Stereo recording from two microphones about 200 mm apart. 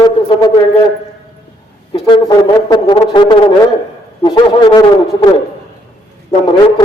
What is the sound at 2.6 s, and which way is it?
A man's voice, 20° left (ahead or behind).